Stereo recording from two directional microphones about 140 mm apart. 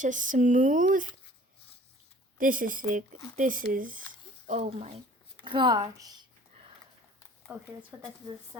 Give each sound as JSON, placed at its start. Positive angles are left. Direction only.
{"t": 0.0, "sound": "speech", "side_deg": -65}
{"t": 2.4, "sound": "speech", "side_deg": -75}
{"t": 4.4, "sound": "speech", "side_deg": -50}
{"t": 5.4, "sound": "speech", "side_deg": -35}
{"t": 7.5, "sound": "speech", "side_deg": -15}
{"t": 7.9, "sound": "speech", "side_deg": -25}